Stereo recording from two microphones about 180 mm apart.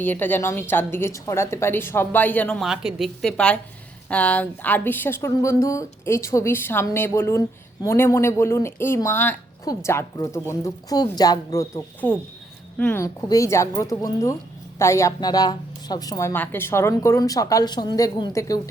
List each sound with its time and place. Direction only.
0.0 s speech: 10° left (ahead or behind)